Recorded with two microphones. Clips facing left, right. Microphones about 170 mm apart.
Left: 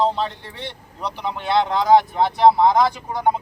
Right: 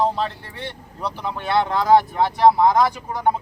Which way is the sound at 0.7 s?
20° left (ahead or behind).